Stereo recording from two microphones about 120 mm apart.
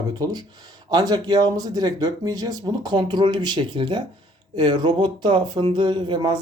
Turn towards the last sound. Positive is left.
turn(degrees=-40)  # may be behind; listen again after turning